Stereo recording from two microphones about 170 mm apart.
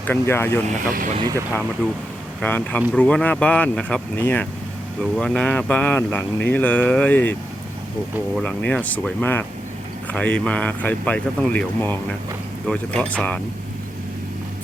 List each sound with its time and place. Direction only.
0.0 s speech: 10° left (ahead or behind)
0.9 s speech: 55° right (ahead or behind)
2.4 s speech: 10° left (ahead or behind)
8.4 s speech: 5° left (ahead or behind)